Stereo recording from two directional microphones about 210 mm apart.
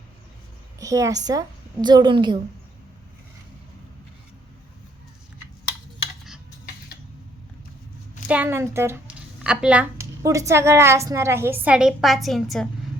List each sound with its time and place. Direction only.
0.8 s speech: 15° right (ahead or behind)
8.3 s speech: 10° right (ahead or behind)